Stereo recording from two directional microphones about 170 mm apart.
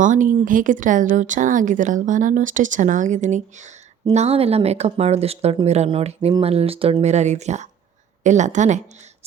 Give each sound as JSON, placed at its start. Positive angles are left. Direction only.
{"t": 0.0, "sound": "speech", "side_deg": -50}